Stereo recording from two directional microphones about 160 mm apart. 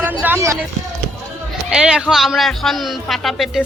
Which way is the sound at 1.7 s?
5° right (ahead or behind).